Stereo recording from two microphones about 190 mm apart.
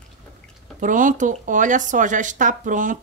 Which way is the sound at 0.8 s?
45° right (ahead or behind).